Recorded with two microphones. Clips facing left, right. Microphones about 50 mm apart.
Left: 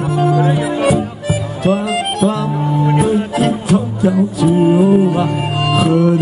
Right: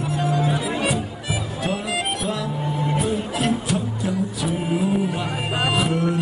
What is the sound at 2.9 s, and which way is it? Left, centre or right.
Music, left.